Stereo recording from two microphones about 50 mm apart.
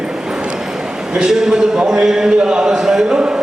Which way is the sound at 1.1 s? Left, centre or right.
Centre.